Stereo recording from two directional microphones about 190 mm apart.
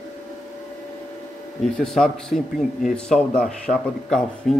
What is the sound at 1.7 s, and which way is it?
A man's voice, centre (ahead or behind).